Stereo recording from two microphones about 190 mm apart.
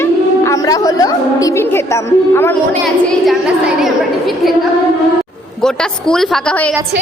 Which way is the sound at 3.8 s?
Centre (ahead or behind).